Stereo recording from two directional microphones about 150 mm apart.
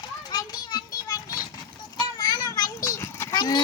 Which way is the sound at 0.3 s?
25° left (ahead or behind).